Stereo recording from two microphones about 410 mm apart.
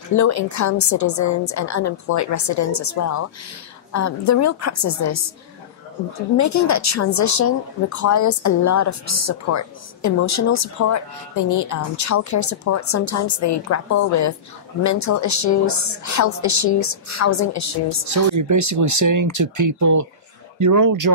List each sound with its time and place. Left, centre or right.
0.1 s a woman's voice: left
6.3 s a woman's voice: left
18.0 s speech: right